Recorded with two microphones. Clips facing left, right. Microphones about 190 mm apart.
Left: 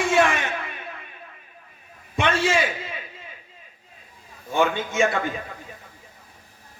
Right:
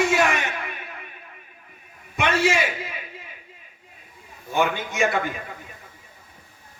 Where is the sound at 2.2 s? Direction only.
30° left (ahead or behind).